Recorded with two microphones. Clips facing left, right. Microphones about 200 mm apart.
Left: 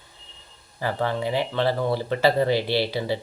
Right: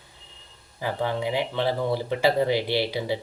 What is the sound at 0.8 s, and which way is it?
Speech, 15° right (ahead or behind).